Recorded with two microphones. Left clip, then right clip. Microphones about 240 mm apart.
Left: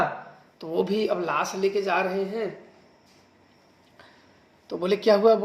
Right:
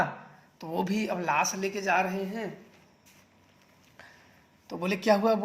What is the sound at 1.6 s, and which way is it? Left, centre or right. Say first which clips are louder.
Speech: left 3 dB; right.